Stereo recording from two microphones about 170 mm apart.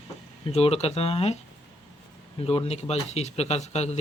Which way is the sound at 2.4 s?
35° left (ahead or behind).